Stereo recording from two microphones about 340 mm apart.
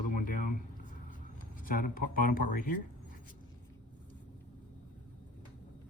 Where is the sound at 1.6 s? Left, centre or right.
Left.